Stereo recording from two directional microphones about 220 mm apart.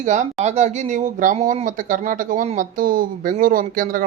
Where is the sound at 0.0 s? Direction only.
35° right (ahead or behind).